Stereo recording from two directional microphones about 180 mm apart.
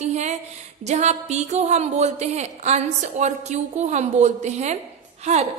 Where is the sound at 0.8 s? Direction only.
40° right (ahead or behind).